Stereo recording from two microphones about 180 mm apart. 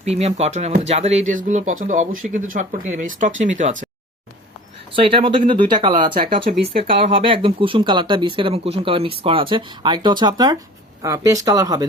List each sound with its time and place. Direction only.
0.0 s speech: 35° right (ahead or behind)
4.9 s speech: 30° right (ahead or behind)